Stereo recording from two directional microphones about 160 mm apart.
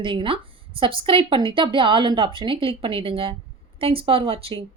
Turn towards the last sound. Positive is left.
turn(degrees=-35)  # may be behind; listen again after turning